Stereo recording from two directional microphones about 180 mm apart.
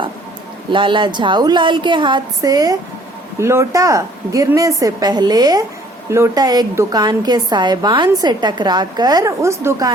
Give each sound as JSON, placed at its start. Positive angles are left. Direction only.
{"t": 0.7, "sound": "a woman's voice", "side_deg": -25}